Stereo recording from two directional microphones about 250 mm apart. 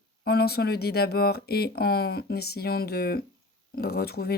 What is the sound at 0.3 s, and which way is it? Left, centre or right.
Speech, left.